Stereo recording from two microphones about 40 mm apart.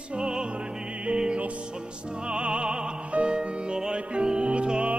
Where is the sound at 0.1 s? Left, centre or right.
Right.